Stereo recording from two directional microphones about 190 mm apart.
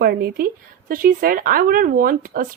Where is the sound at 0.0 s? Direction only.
55° right (ahead or behind).